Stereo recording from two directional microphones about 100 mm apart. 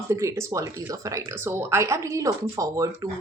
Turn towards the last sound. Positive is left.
turn(degrees=-35)  # may be behind; listen again after turning